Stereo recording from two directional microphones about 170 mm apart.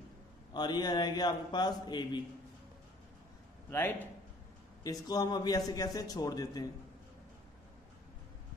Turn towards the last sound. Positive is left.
turn(degrees=20)  # may be behind; listen again after turning